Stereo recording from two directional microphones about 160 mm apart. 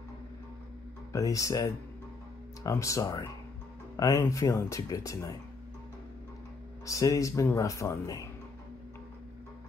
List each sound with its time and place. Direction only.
1.1 s speech: 20° left (ahead or behind)
6.9 s speech: 20° left (ahead or behind)